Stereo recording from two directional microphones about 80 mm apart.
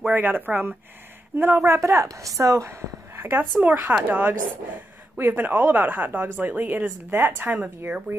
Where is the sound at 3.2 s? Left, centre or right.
Right.